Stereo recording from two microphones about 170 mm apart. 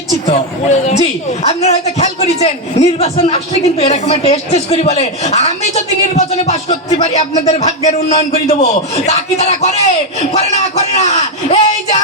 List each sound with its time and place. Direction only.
0.9 s a woman's voice: 40° left (ahead or behind)